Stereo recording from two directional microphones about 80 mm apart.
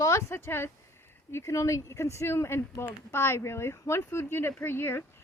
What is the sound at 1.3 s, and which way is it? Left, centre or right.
Speech, left.